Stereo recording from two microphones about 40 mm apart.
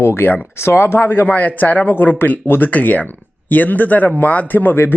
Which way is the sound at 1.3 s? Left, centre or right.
Left.